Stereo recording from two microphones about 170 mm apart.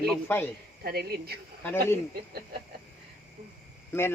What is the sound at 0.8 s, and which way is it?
Speech, 65° right (ahead or behind).